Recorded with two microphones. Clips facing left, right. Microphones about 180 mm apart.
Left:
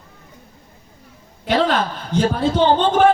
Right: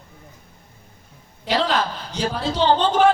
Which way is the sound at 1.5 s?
55° left (ahead or behind).